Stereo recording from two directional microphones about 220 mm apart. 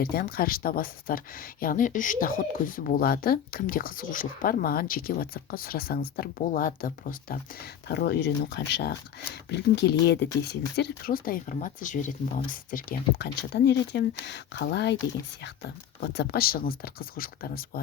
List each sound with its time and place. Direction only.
0.0 s speech: 40° left (ahead or behind)
16.0 s speech: 50° left (ahead or behind)